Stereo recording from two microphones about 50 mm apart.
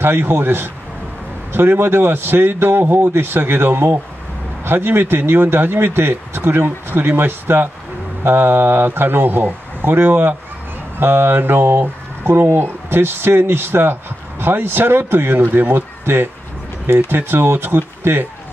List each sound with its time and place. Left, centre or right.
0.0 s speech: right
17.1 s speech: right